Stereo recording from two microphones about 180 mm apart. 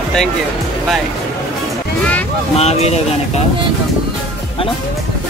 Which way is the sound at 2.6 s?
35° left (ahead or behind).